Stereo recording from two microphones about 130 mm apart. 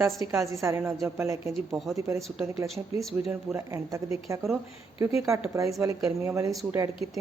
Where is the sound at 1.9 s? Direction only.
25° right (ahead or behind).